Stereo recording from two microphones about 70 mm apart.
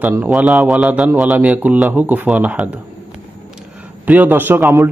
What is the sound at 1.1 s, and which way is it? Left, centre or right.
Speech, centre.